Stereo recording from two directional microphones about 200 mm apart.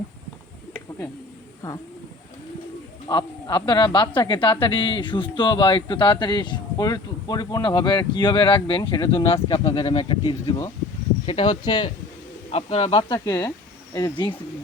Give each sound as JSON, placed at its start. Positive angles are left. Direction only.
{"t": 3.1, "sound": "a man's voice", "side_deg": 25}
{"t": 9.5, "sound": "speech", "side_deg": 15}
{"t": 9.9, "sound": "a man's voice", "side_deg": 25}